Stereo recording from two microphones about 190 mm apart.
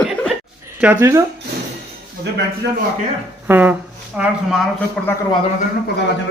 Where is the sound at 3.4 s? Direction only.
10° right (ahead or behind).